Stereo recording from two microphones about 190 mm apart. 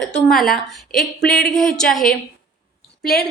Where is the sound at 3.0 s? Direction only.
55° left (ahead or behind).